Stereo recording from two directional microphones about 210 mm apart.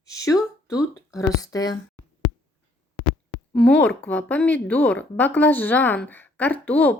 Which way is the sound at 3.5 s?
5° left (ahead or behind).